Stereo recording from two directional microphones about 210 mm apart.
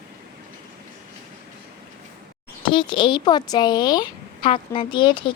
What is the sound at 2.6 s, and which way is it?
A woman's voice, 25° left (ahead or behind).